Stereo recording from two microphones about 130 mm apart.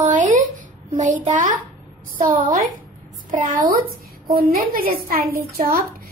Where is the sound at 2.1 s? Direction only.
90° right.